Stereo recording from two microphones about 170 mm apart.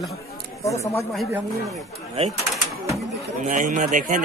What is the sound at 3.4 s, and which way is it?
Speech, 50° right (ahead or behind).